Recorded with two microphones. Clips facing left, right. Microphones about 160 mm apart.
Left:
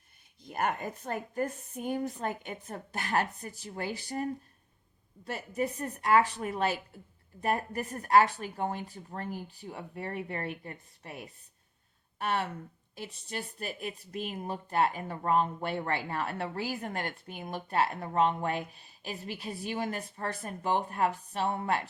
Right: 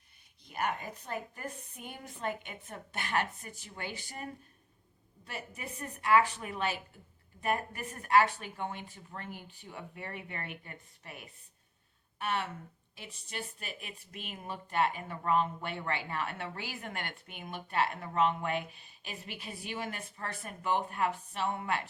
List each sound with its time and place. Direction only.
0.4 s speech: 45° left (ahead or behind)
12.2 s speech: 35° left (ahead or behind)